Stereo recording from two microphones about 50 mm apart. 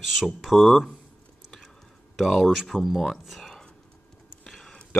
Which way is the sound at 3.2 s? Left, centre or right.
Centre.